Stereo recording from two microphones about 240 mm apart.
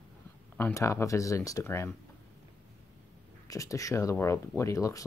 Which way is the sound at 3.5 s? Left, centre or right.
Centre.